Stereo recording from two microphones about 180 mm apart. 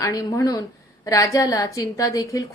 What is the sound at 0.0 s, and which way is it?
A woman's voice, 20° left (ahead or behind).